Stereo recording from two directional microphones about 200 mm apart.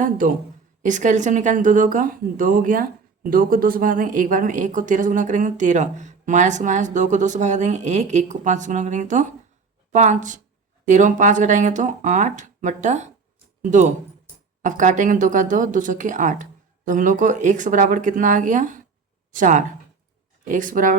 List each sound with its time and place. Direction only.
0.8 s speech: 40° right (ahead or behind)